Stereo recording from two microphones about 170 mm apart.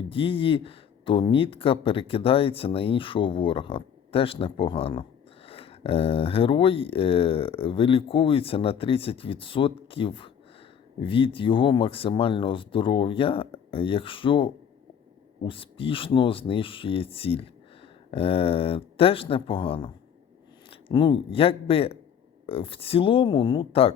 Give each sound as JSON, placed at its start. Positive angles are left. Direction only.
{"t": 0.1, "sound": "speech", "side_deg": 30}